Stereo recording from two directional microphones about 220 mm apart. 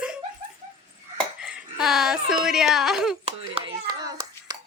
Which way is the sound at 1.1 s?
5° right (ahead or behind).